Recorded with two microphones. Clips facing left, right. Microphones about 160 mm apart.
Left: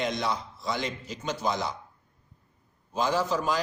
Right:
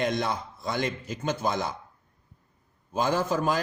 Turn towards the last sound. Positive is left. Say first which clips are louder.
# right 1 dB
turn(degrees=-50)  # may be behind; listen again after turning